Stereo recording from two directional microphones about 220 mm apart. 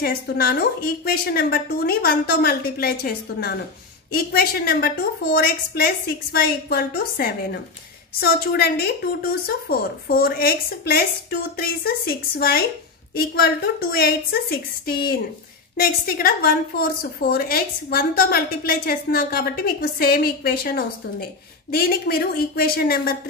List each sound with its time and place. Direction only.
0.0 s a woman's voice: 45° left (ahead or behind)